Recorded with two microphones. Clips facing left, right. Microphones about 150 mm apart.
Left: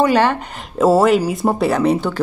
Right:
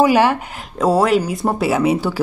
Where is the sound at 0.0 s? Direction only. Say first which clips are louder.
Right 1 dB; 10° right (ahead or behind).